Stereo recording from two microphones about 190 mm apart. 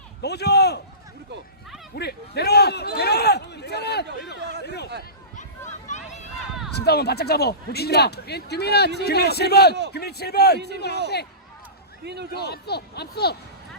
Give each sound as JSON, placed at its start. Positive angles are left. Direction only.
{"t": 0.2, "sound": "a man's voice", "side_deg": 60}
{"t": 2.0, "sound": "a man's voice", "side_deg": 60}
{"t": 5.9, "sound": "a sound", "side_deg": 35}
{"t": 6.7, "sound": "a man's voice", "side_deg": 55}
{"t": 12.0, "sound": "a man's voice", "side_deg": -60}
{"t": 12.3, "sound": "a man's voice", "side_deg": 60}